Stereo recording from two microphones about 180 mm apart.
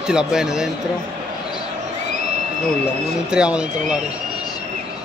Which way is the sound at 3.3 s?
5° right (ahead or behind).